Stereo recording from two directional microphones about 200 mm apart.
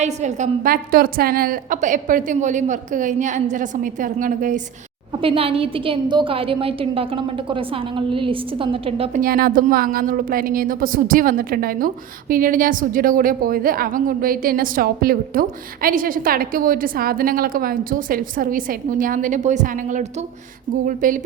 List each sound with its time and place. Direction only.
0.0 s a woman's voice: 35° right (ahead or behind)
5.2 s a woman's voice: 25° right (ahead or behind)
9.2 s a woman's voice: 45° right (ahead or behind)